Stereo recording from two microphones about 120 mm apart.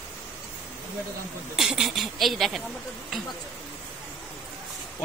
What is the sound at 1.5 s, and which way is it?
A woman's voice, 5° right (ahead or behind).